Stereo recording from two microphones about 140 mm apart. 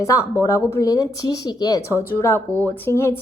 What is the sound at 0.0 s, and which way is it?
A woman's voice, 20° left (ahead or behind).